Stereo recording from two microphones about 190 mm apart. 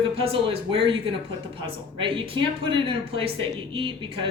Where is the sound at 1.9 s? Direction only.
25° right (ahead or behind).